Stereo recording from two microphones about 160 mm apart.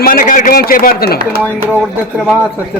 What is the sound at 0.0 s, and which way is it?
A man's voice, 60° left (ahead or behind).